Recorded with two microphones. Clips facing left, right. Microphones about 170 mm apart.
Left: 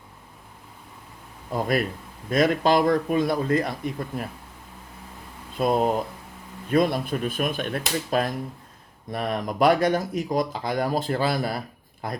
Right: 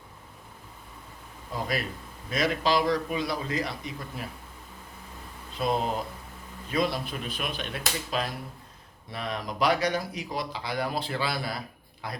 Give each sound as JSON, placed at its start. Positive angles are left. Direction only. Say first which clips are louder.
{"t": 1.5, "sound": "speech", "louder": "left 7 dB", "side_deg": 50}
{"t": 5.5, "sound": "speech", "louder": "left 6 dB", "side_deg": 50}